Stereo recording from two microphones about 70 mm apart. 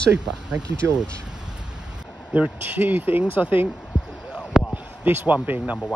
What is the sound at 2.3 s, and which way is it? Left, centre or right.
Speech, right.